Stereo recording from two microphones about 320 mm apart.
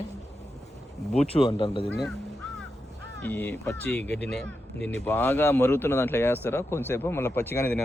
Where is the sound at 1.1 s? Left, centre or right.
Centre.